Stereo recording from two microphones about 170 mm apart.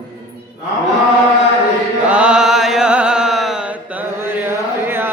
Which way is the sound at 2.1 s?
5° right (ahead or behind).